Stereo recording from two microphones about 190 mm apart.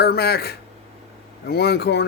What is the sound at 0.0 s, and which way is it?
Speech, 55° left (ahead or behind).